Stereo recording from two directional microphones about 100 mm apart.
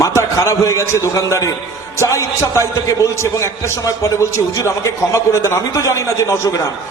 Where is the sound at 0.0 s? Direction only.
30° left (ahead or behind).